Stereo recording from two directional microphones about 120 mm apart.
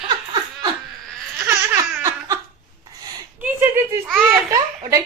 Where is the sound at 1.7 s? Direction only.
25° right (ahead or behind).